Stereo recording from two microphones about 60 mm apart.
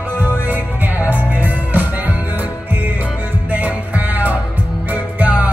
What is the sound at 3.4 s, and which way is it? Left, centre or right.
Music, right.